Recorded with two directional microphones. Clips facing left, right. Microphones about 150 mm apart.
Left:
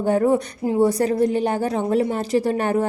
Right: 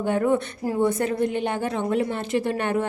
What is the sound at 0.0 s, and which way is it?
A woman's voice, 40° left (ahead or behind).